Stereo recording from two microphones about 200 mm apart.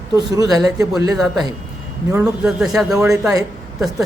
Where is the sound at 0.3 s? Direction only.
15° right (ahead or behind).